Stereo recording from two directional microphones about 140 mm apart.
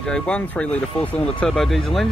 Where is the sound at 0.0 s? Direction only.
5° left (ahead or behind).